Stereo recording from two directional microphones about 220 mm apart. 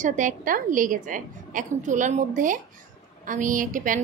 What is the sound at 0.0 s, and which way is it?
Speech, 35° right (ahead or behind).